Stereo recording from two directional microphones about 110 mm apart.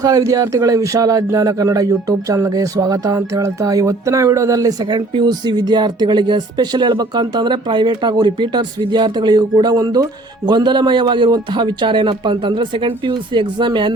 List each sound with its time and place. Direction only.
0.0 s speech: 35° right (ahead or behind)